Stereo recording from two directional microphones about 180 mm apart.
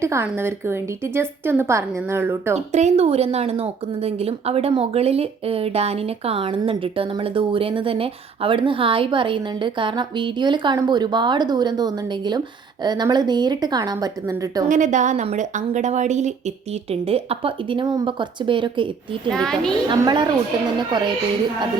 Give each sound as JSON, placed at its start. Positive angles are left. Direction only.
{"t": 0.0, "sound": "a woman's voice", "side_deg": -15}
{"t": 2.7, "sound": "speech", "side_deg": -35}
{"t": 14.7, "sound": "a woman's voice", "side_deg": -45}
{"t": 19.3, "sound": "a child's voice", "side_deg": 5}
{"t": 19.9, "sound": "speech", "side_deg": -25}